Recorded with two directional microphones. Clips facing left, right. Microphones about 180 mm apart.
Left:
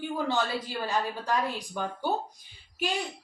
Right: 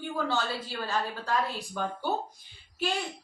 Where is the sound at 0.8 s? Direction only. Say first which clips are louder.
Left 1 dB; 15° left (ahead or behind).